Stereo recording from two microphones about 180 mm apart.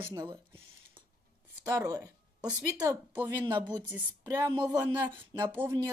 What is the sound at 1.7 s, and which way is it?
Speech, 20° right (ahead or behind).